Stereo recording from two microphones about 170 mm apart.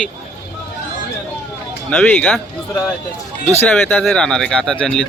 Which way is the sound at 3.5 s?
10° left (ahead or behind).